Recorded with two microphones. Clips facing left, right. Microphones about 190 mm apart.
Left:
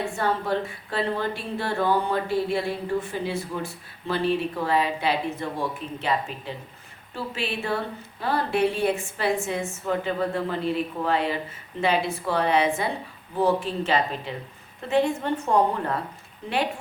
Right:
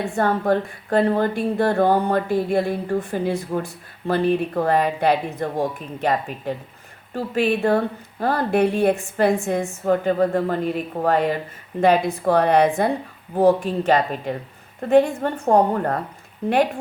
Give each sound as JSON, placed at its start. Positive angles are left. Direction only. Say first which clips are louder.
{"t": 0.2, "sound": "a woman's voice", "louder": "right 7 dB", "side_deg": -50}